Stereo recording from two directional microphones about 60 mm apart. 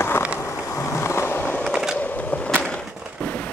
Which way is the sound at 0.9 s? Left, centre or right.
Left.